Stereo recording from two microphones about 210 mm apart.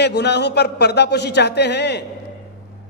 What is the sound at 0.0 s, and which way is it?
Speech, 55° left (ahead or behind).